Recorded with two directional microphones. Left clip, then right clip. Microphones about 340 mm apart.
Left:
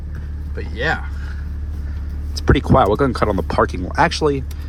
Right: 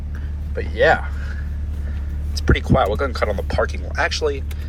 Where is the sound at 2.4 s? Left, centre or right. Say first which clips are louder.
Left 4 dB; left.